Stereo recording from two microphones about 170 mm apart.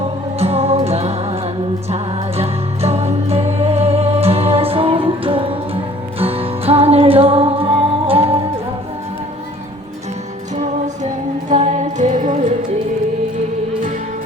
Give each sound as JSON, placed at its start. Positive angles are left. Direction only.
{"t": 0.3, "sound": "music", "side_deg": -35}
{"t": 11.0, "sound": "music", "side_deg": -45}